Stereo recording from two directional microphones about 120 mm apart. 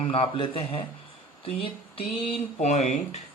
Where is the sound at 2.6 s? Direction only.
75° left (ahead or behind).